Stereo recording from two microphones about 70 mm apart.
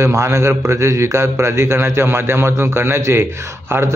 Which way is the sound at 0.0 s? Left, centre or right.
Right.